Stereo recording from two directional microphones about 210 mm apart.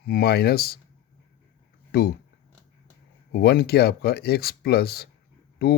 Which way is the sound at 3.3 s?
50° left (ahead or behind).